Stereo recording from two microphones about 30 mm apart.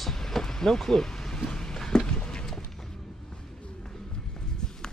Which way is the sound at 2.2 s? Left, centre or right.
Left.